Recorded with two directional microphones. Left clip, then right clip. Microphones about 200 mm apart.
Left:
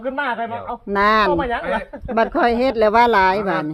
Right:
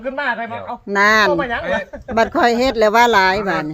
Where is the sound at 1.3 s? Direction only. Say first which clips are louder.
Right 1 dB; 15° right (ahead or behind).